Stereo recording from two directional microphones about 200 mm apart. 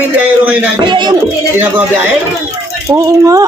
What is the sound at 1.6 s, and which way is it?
A man's voice, 10° right (ahead or behind).